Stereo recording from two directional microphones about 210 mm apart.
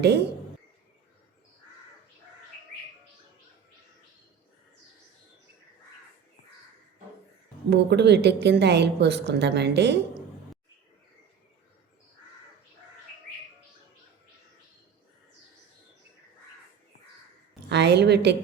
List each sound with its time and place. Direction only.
0.0 s speech: 50° right (ahead or behind)
7.7 s a woman's voice: 55° right (ahead or behind)
17.7 s a woman's voice: 55° right (ahead or behind)